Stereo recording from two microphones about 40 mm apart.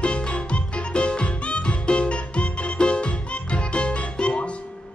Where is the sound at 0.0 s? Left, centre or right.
Left.